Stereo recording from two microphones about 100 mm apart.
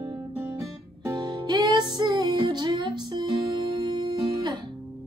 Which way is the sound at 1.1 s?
45° right (ahead or behind).